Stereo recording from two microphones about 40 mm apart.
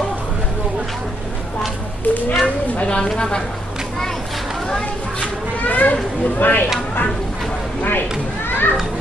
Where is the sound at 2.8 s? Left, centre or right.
Left.